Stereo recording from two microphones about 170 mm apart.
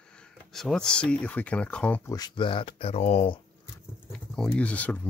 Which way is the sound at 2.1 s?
25° left (ahead or behind).